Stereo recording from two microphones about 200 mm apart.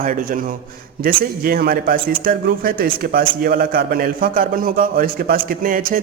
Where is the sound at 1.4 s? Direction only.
45° right (ahead or behind).